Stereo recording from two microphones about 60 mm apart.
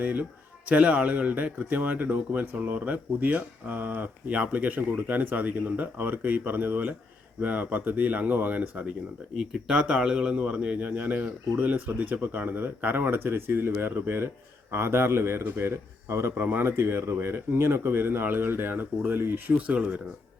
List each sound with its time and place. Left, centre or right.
0.0 s speech: right
9.4 s a man's voice: centre; by 16.5 s right
16.5 s speech: right
19.6 s speech: right